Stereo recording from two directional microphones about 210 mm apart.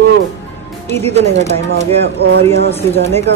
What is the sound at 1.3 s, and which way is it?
Speech, 35° right (ahead or behind).